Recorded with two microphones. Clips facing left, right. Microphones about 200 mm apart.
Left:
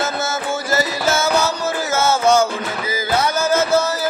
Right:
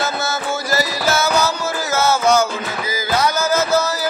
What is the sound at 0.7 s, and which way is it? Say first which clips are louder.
Music: left 1 dB; 25° left (ahead or behind).